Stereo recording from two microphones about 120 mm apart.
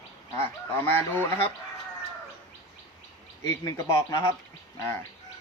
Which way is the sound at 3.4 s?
25° left (ahead or behind).